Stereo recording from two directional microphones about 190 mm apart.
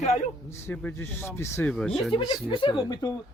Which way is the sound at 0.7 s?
10° left (ahead or behind).